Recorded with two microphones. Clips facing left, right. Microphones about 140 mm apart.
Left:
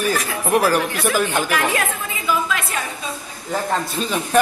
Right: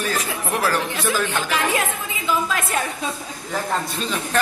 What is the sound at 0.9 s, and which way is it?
Speech, 15° right (ahead or behind).